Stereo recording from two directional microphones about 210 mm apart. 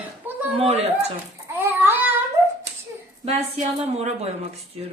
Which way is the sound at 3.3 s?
30° right (ahead or behind).